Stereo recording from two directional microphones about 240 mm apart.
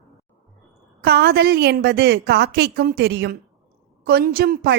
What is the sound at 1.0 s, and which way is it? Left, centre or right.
A woman's voice, right.